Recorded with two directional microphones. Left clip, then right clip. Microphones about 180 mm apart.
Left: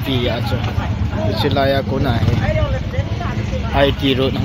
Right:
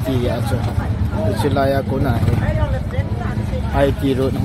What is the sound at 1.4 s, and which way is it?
Speech, 15° right (ahead or behind).